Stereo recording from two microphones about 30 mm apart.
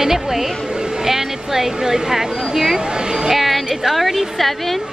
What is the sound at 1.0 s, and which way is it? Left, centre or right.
Speech, centre.